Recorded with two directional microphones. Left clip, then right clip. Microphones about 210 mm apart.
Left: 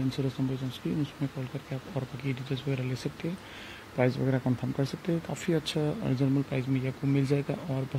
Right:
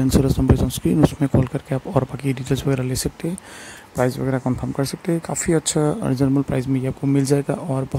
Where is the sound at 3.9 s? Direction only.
25° right (ahead or behind).